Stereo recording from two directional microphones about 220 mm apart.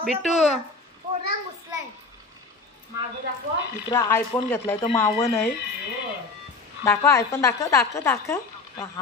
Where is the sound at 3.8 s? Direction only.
10° left (ahead or behind).